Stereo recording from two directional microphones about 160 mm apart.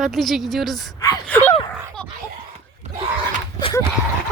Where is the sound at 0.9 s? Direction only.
20° left (ahead or behind).